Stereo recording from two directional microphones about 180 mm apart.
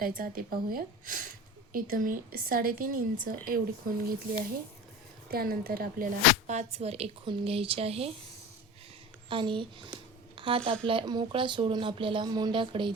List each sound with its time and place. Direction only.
0.0 s a woman's voice: 50° right (ahead or behind)
6.5 s speech: 40° right (ahead or behind)
9.3 s speech: 30° right (ahead or behind)
10.3 s a sound: 30° right (ahead or behind)
10.8 s speech: 25° right (ahead or behind)